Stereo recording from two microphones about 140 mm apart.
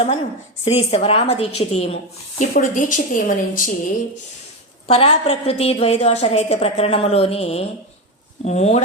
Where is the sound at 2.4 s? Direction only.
70° left (ahead or behind).